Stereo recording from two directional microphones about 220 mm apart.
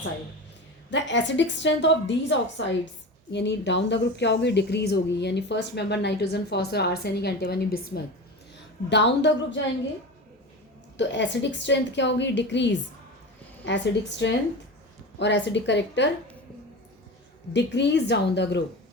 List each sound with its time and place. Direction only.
0.9 s a woman's voice: 55° left (ahead or behind)
10.9 s a woman's voice: 55° left (ahead or behind)
17.5 s a woman's voice: 50° left (ahead or behind)